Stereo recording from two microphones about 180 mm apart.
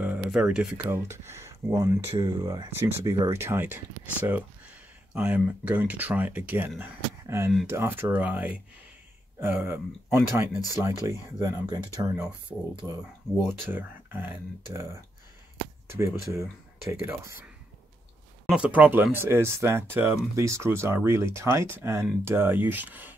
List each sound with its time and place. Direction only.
0.0 s a sound: 5° right (ahead or behind)
0.7 s speech: 15° right (ahead or behind)
13.5 s speech: 10° right (ahead or behind)
17.0 s speech: 15° right (ahead or behind)
18.5 s speech: 5° right (ahead or behind)